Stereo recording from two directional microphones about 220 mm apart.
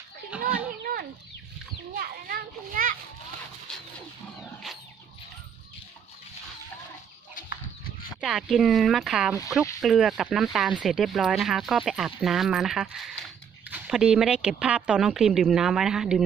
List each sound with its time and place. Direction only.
0.3 s children playing: 5° right (ahead or behind)
2.0 s children playing: 40° right (ahead or behind)
8.2 s speech: centre (ahead or behind)